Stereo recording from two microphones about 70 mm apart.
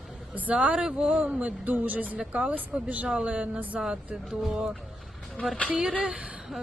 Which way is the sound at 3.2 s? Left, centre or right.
Centre.